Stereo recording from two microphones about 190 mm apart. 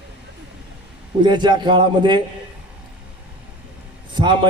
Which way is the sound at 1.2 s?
25° right (ahead or behind).